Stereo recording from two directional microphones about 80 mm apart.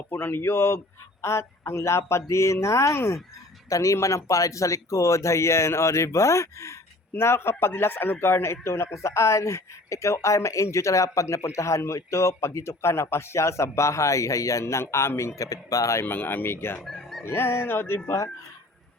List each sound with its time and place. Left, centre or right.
0.1 s a man's voice: left
16.0 s speech: left
16.8 s fowl: centre
17.2 s a man's voice: left